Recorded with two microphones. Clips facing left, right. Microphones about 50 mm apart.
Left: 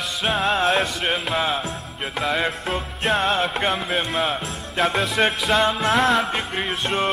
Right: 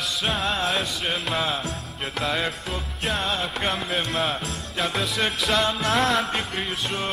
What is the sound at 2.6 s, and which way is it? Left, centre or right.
Music, left.